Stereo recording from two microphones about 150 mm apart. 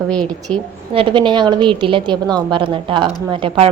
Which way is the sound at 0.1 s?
5° left (ahead or behind).